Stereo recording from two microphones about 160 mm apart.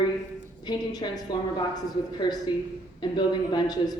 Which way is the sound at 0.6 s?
25° left (ahead or behind).